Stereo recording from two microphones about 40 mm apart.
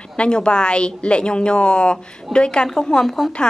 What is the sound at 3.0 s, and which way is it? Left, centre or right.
Speech, centre.